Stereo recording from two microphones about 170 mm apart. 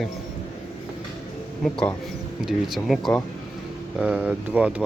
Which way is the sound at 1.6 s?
5° left (ahead or behind).